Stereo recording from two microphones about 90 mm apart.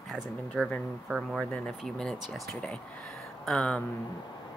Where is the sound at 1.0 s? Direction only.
10° right (ahead or behind).